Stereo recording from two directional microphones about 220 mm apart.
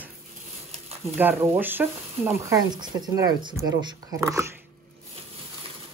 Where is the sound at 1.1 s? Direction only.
10° right (ahead or behind).